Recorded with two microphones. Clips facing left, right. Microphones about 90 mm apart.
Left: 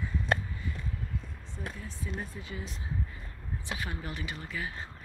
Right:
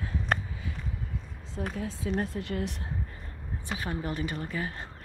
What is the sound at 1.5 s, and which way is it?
Speech, 90° right.